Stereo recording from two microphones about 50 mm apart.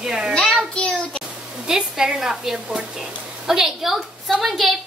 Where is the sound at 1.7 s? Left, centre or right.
Centre.